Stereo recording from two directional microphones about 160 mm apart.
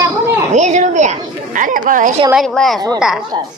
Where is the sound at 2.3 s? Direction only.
Centre (ahead or behind).